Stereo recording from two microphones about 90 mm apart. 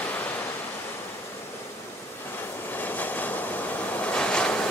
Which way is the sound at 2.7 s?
20° left (ahead or behind).